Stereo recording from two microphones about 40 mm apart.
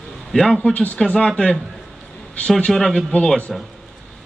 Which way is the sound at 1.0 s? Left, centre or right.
Centre.